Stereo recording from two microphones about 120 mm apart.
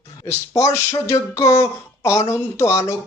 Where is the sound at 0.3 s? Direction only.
25° left (ahead or behind).